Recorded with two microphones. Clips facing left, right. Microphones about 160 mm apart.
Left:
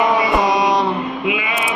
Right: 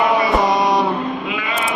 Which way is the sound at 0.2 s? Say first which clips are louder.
Even; 15° left (ahead or behind).